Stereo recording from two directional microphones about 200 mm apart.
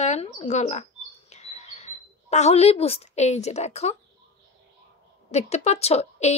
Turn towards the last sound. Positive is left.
turn(degrees=35)  # may be behind; listen again after turning